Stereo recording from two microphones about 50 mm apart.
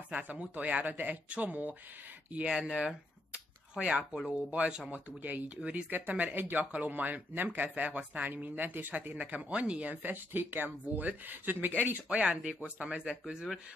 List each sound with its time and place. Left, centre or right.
0.1 s speech: right
2.5 s speech: centre
3.8 s speech: right
5.9 s speech: right
9.1 s speech: right
12.1 s speech: right